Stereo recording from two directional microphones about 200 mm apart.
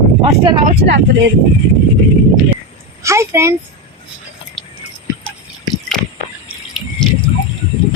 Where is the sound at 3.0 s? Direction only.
15° right (ahead or behind).